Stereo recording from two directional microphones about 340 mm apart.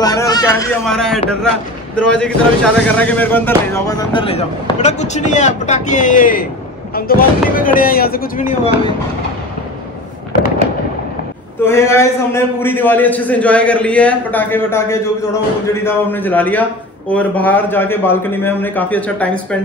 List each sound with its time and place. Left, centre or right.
0.0 s speech: centre
11.6 s a man's voice: centre